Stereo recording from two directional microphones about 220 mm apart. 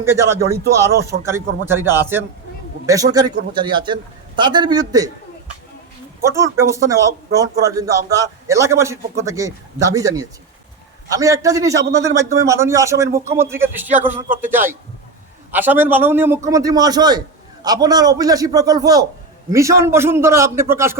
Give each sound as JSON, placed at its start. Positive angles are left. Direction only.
{"t": 0.0, "sound": "a man's voice", "side_deg": -10}
{"t": 1.6, "sound": "a man's voice", "side_deg": -10}
{"t": 6.2, "sound": "a man's voice", "side_deg": -15}